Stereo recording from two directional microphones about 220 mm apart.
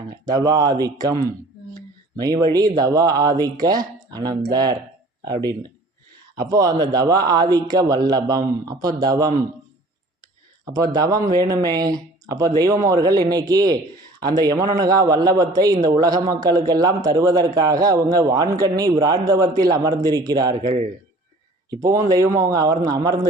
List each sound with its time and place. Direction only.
0.1 s a man's voice: 15° right (ahead or behind)
10.7 s a man's voice: 15° right (ahead or behind)
21.7 s a man's voice: 15° right (ahead or behind)